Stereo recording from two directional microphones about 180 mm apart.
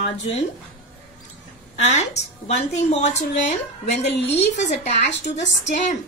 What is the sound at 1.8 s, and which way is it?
A woman's voice, 40° left (ahead or behind).